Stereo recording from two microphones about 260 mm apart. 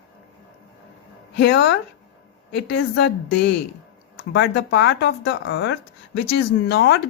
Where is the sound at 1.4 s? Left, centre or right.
Left.